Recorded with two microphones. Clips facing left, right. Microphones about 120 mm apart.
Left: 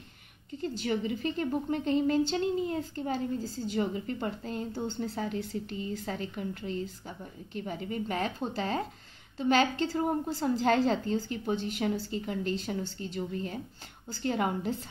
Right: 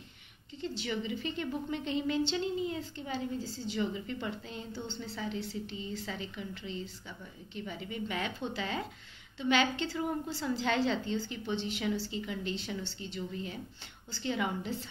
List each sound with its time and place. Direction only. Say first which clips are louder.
0.5 s a woman's voice: left 5 dB; 45° left (ahead or behind)